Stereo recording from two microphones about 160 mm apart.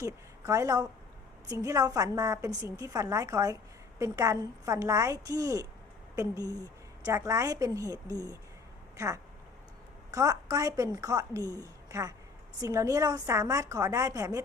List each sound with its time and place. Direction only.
0.0 s a woman's voice: 20° right (ahead or behind)